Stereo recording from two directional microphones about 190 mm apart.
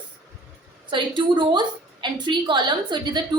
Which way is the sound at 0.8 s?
25° right (ahead or behind).